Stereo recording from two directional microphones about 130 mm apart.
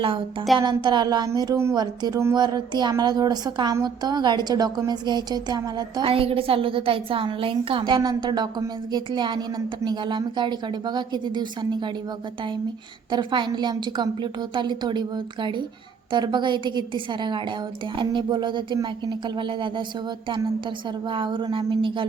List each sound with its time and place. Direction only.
0.6 s speech: 35° right (ahead or behind)
6.1 s a woman's voice: 45° right (ahead or behind)
13.1 s speech: 35° right (ahead or behind)